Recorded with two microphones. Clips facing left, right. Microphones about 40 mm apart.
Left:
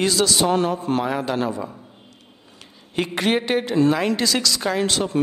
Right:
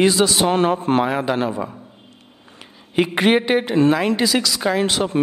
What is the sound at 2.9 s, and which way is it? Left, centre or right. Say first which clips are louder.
Speech: right 5 dB; centre.